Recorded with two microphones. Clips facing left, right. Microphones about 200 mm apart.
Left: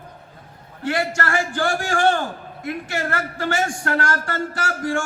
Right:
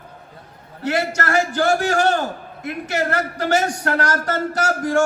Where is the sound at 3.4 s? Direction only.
40° right (ahead or behind).